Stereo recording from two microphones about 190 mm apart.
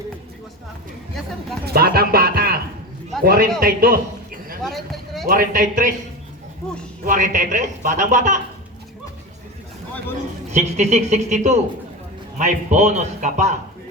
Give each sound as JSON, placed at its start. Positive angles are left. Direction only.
{"t": 1.6, "sound": "speech", "side_deg": -55}
{"t": 3.6, "sound": "a sound", "side_deg": -50}
{"t": 4.6, "sound": "a sound", "side_deg": 0}
{"t": 5.3, "sound": "speech", "side_deg": -45}
{"t": 7.0, "sound": "speech", "side_deg": -45}
{"t": 10.5, "sound": "a man's voice", "side_deg": -40}